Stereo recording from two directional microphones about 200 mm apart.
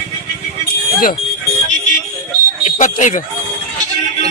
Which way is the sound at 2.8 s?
40° left (ahead or behind).